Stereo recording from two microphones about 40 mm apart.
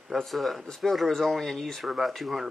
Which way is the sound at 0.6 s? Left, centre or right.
Centre.